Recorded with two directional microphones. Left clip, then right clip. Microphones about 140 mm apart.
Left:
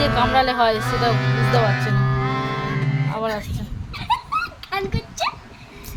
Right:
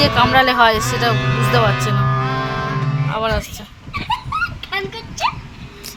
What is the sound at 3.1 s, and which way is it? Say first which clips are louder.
Speech: right 5 dB; 5° right (ahead or behind).